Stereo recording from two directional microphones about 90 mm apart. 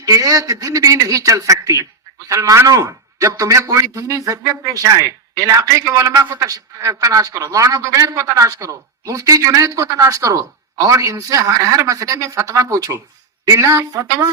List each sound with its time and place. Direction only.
0.0 s a man's voice: 40° right (ahead or behind)